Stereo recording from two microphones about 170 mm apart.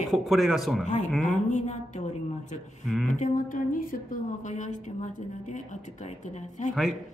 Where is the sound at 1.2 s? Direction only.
45° left (ahead or behind).